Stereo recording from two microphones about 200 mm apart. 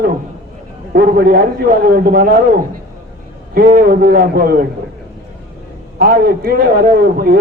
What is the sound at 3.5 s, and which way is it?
A man's voice, 45° right (ahead or behind).